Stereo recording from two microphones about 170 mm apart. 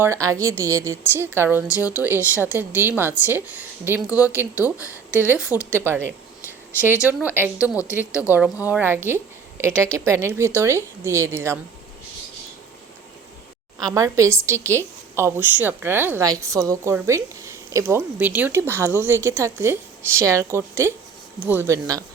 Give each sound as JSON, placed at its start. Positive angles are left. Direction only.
{"t": 0.0, "sound": "a woman's voice", "side_deg": -15}
{"t": 13.7, "sound": "a woman's voice", "side_deg": -20}